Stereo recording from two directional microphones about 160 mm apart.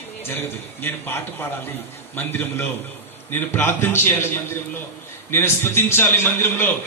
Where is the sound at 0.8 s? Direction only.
15° left (ahead or behind).